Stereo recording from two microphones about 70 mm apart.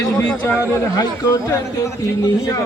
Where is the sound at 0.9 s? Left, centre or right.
Left.